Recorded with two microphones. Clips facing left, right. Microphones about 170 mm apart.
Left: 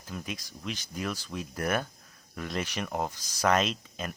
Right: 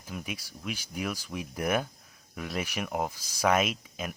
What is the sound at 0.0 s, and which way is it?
Speech, 10° right (ahead or behind).